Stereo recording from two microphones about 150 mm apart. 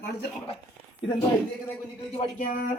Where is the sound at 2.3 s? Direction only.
60° left (ahead or behind).